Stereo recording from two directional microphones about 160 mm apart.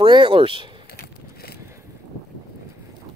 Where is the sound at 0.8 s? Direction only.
75° left (ahead or behind).